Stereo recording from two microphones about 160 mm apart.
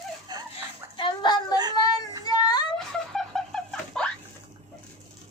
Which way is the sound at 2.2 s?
25° left (ahead or behind).